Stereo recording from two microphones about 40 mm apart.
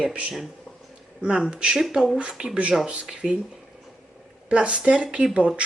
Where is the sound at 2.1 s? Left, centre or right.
Right.